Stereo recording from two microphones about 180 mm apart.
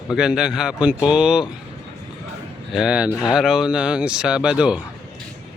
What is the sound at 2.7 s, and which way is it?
Speech, 5° right (ahead or behind).